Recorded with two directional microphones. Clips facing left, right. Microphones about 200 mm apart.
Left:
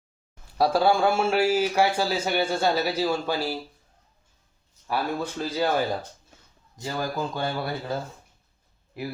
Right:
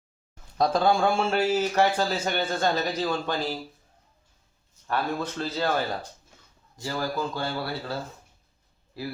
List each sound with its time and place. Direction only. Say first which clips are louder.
0.6 s a man's voice: left 1 dB; 10° left (ahead or behind)
4.9 s a man's voice: left 1 dB; 10° left (ahead or behind)